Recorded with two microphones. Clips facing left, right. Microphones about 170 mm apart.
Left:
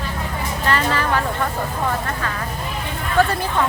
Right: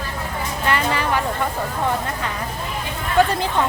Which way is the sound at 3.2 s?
15° right (ahead or behind).